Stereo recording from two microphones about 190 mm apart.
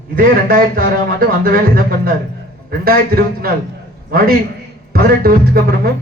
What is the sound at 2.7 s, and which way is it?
A man's voice, 55° right (ahead or behind).